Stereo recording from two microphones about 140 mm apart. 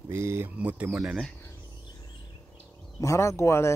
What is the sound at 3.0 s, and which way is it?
Speech, 20° left (ahead or behind).